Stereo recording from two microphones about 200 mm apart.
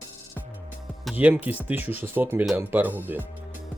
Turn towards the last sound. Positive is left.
turn(degrees=-10)  # may be behind; listen again after turning